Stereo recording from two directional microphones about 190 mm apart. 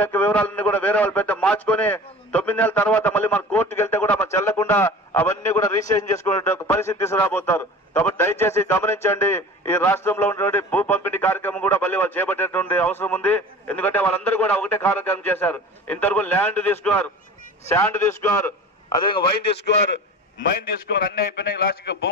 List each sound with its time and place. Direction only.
0.0 s a man's voice: 10° left (ahead or behind)
20.4 s a man's voice: 50° left (ahead or behind)